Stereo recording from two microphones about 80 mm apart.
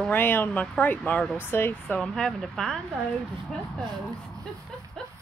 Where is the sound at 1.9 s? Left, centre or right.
Centre.